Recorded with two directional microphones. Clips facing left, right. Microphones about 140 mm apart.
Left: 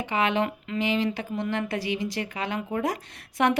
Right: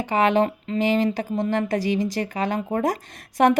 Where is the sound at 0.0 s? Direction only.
40° right (ahead or behind).